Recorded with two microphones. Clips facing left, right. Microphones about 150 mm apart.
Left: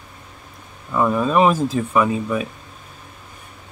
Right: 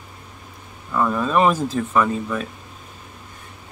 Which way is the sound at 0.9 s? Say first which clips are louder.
Left 2 dB; 10° left (ahead or behind).